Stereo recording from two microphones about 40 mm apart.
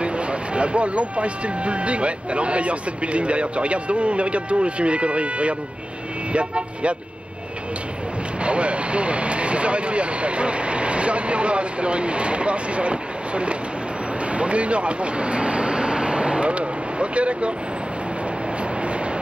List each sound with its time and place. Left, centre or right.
0.0 s speech: right
8.5 s speech: right
14.3 s vehicle: right